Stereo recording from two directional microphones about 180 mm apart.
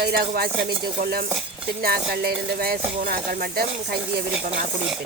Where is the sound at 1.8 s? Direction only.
60° right (ahead or behind).